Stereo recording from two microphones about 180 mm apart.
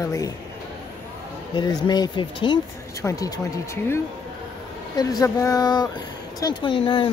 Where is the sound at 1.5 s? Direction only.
25° left (ahead or behind).